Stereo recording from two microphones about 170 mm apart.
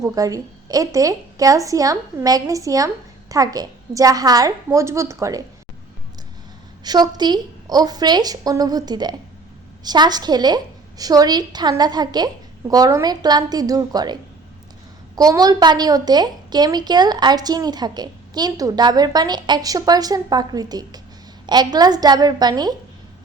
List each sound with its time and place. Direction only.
0.0 s a woman's voice: 20° right (ahead or behind)
6.8 s a woman's voice: 25° right (ahead or behind)